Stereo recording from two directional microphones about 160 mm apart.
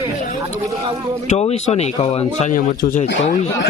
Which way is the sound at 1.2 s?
40° left (ahead or behind).